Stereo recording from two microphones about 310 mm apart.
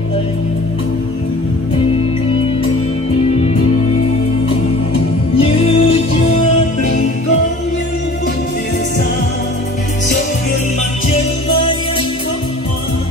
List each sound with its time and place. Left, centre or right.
5.4 s music: centre
11.1 s music: centre